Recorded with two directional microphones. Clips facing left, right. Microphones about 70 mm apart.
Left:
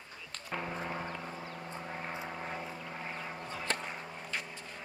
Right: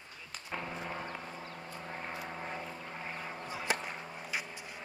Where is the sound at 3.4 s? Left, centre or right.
Centre.